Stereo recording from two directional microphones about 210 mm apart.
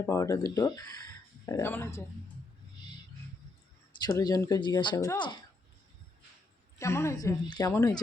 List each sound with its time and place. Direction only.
0.0 s speech: 15° left (ahead or behind)
4.0 s speech: 15° left (ahead or behind)
6.7 s speech: 15° left (ahead or behind)